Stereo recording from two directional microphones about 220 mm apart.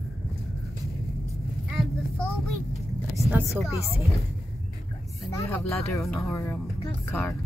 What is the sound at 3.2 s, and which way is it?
Speech, centre (ahead or behind).